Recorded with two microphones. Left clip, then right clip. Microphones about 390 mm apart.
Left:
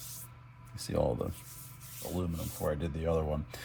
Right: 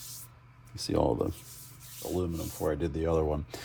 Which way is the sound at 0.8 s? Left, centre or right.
Centre.